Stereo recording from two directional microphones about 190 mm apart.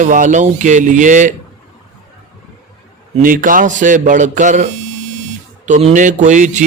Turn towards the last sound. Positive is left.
turn(degrees=-40)  # may be behind; listen again after turning